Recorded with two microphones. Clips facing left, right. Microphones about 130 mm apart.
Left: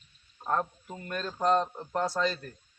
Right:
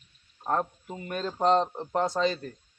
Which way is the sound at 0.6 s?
10° right (ahead or behind).